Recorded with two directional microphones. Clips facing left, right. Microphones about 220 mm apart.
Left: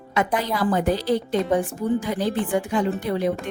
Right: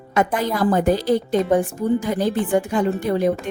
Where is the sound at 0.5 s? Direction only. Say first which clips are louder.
Right 4 dB; 45° right (ahead or behind).